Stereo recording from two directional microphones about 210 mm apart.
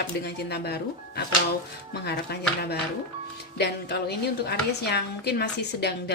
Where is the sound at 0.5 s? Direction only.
50° left (ahead or behind).